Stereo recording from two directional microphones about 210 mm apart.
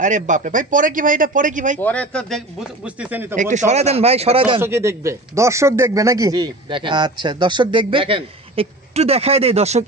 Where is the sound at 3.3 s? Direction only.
35° right (ahead or behind).